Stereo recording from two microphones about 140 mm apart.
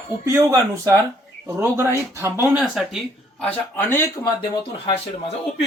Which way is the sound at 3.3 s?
10° left (ahead or behind).